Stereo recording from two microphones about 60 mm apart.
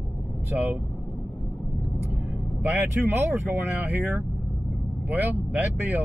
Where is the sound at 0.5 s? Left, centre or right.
Centre.